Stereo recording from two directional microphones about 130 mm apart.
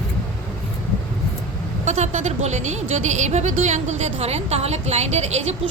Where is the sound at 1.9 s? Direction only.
65° right (ahead or behind).